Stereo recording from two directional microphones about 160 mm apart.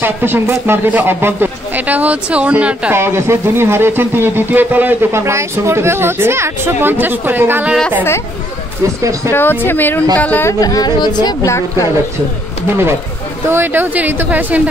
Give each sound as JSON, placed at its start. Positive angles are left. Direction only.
{"t": 0.0, "sound": "speech", "side_deg": -15}
{"t": 9.3, "sound": "speech", "side_deg": 15}
{"t": 10.6, "sound": "speech", "side_deg": 25}
{"t": 13.5, "sound": "speech", "side_deg": -15}